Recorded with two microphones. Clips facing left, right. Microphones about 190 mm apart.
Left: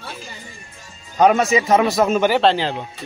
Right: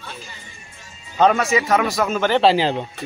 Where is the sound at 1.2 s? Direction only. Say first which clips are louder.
Left 2 dB; 20° left (ahead or behind).